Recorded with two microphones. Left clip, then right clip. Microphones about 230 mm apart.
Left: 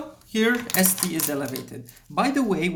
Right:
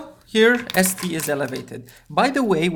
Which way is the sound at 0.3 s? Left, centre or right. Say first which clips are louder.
Right 7 dB; right.